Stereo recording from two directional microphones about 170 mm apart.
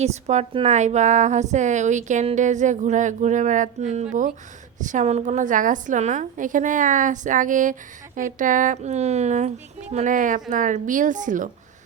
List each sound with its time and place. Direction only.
0.0 s a woman's voice: 40° right (ahead or behind)